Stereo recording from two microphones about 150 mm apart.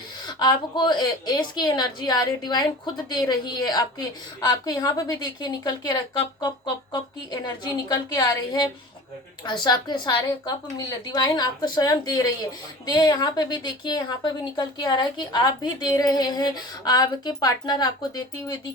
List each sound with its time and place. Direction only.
0.3 s a woman's voice: 30° left (ahead or behind)